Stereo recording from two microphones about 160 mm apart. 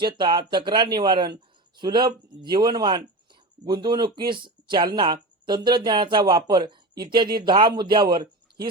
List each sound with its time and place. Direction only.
0.0 s speech: 30° right (ahead or behind)